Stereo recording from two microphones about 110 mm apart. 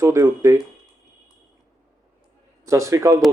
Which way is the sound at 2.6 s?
25° right (ahead or behind).